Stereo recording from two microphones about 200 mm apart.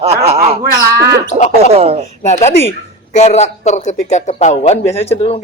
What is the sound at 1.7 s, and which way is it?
Speech, 30° right (ahead or behind).